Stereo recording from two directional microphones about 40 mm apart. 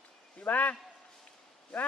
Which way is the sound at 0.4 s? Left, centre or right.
Left.